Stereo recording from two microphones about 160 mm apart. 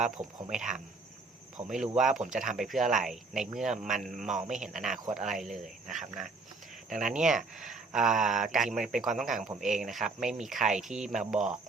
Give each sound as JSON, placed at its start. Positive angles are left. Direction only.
{"t": 0.2, "sound": "speech", "side_deg": -25}
{"t": 0.5, "sound": "speech", "side_deg": -5}